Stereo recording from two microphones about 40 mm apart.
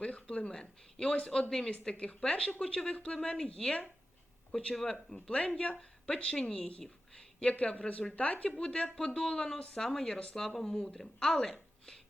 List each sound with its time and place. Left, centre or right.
0.0 s speech: left
0.5 s speech: left
1.8 s speech: left
4.7 s speech: centre
5.3 s speech: left
6.8 s a sound: centre
7.6 s speech: left
7.9 s speech: left
10.3 s speech: centre
11.4 s a sound: centre